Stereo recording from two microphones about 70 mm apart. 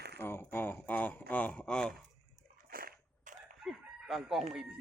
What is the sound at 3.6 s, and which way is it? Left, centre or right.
Chicken, centre.